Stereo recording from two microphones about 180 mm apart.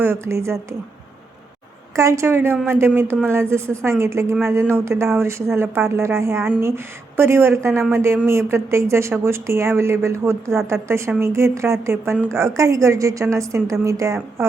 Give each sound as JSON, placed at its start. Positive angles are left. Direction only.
{"t": 0.0, "sound": "a woman's voice", "side_deg": -15}
{"t": 2.0, "sound": "a woman's voice", "side_deg": -15}